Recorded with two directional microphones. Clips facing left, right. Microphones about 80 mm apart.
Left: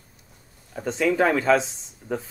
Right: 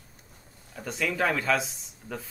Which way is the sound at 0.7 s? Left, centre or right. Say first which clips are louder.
Left 8 dB; left.